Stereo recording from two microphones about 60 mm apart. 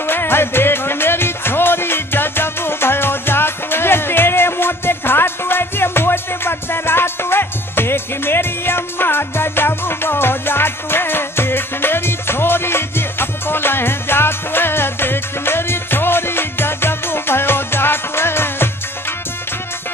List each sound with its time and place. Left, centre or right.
0.0 s music: left